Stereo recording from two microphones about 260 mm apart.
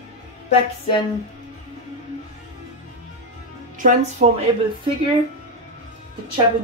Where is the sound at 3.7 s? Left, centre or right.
Right.